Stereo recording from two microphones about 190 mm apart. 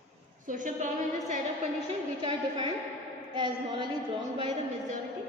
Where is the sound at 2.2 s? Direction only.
25° right (ahead or behind).